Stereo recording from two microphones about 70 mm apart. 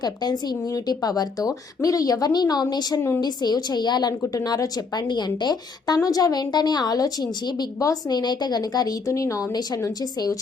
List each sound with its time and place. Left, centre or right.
0.0 s a woman's voice: left
0.6 s a woman's voice: left
4.3 s a woman's voice: left
7.8 s a woman's voice: left